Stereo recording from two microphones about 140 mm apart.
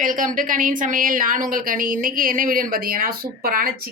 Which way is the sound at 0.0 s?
70° right (ahead or behind).